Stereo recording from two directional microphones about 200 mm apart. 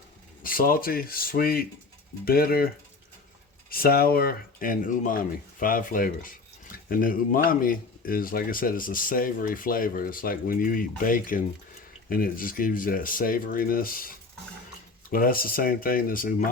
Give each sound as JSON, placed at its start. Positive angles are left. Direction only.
{"t": 0.4, "sound": "speech", "side_deg": 45}
{"t": 3.7, "sound": "speech", "side_deg": 50}
{"t": 15.1, "sound": "speech", "side_deg": 45}